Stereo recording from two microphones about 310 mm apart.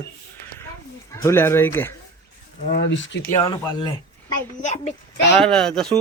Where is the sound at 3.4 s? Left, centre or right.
Centre.